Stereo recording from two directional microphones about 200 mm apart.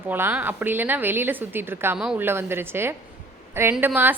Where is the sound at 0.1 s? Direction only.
10° right (ahead or behind).